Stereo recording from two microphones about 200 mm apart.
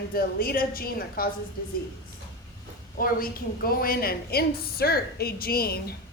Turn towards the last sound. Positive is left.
turn(degrees=50)  # may be behind; listen again after turning